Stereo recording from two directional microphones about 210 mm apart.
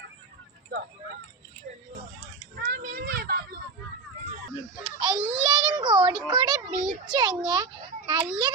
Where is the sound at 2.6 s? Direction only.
45° right (ahead or behind).